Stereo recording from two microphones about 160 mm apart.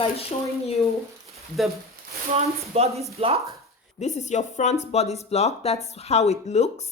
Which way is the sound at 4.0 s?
45° left (ahead or behind).